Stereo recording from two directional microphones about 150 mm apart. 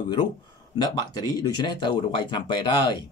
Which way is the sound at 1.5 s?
30° left (ahead or behind).